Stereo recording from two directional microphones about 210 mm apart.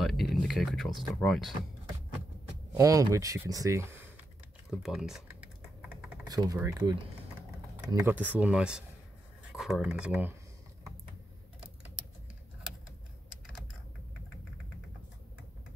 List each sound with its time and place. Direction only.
0.0 s speech: centre (ahead or behind)
2.7 s speech: 15° right (ahead or behind)
4.6 s speech: centre (ahead or behind)
6.2 s speech: 20° right (ahead or behind)